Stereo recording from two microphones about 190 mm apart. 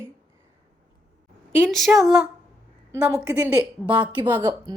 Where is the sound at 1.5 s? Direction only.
5° left (ahead or behind).